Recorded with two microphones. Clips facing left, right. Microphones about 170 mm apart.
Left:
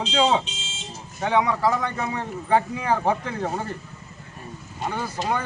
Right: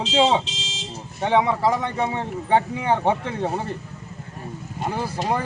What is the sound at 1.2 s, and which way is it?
Speech, 25° right (ahead or behind).